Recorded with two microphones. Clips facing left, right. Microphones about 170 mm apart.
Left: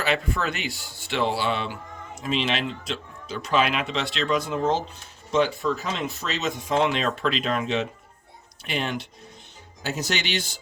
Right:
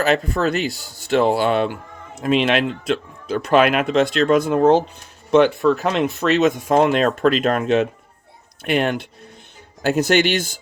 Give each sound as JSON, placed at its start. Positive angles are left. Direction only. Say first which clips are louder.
{"t": 0.0, "sound": "speech", "louder": "right 7 dB", "side_deg": -40}